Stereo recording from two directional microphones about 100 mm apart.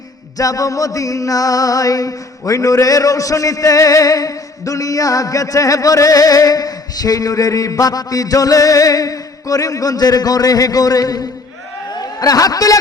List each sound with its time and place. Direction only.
0.3 s a man's voice: 35° left (ahead or behind)